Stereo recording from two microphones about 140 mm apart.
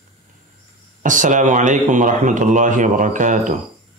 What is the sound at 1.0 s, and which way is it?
Speech, 65° right (ahead or behind).